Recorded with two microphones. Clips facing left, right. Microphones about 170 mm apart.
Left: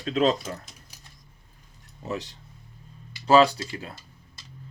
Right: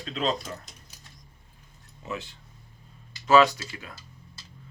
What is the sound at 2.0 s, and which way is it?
Speech, 40° left (ahead or behind).